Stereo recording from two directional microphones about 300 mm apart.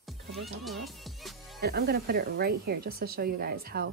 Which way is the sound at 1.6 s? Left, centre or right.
Right.